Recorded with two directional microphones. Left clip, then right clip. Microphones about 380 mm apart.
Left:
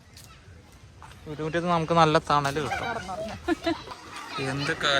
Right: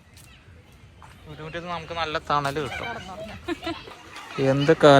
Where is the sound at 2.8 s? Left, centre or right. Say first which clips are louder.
Left 2 dB; left.